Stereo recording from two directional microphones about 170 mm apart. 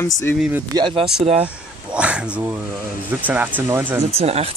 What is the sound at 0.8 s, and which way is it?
Speech, 30° right (ahead or behind).